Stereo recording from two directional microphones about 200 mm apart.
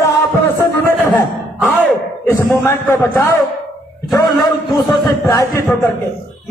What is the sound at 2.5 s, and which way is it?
Speech, 10° left (ahead or behind).